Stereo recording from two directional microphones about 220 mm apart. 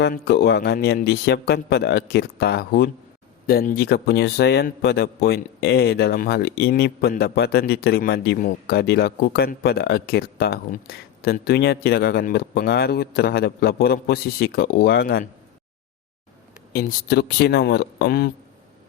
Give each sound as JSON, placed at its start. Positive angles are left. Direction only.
{"t": 0.0, "sound": "a man's voice", "side_deg": 45}
{"t": 16.7, "sound": "a man's voice", "side_deg": 50}